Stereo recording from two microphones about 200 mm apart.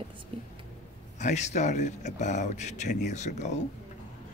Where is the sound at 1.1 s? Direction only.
35° left (ahead or behind).